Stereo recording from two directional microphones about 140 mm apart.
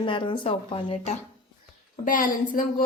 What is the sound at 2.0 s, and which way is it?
Speech, 80° left.